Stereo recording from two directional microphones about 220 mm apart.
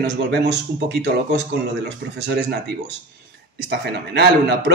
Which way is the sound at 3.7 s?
50° right (ahead or behind).